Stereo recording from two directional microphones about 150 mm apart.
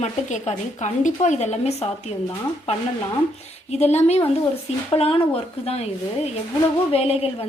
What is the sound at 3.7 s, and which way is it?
A woman's voice, 45° left (ahead or behind).